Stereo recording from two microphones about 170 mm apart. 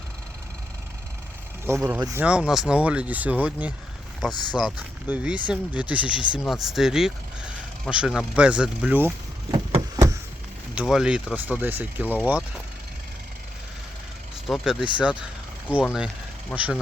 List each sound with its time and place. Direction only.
1.6 s speech: 10° right (ahead or behind)
2.2 s speech: 5° right (ahead or behind)
9.5 s vehicle: 25° right (ahead or behind)
10.8 s speech: 5° right (ahead or behind)
14.4 s speech: centre (ahead or behind)